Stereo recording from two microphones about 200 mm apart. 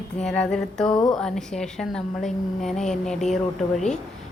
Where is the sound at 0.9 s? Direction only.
20° left (ahead or behind).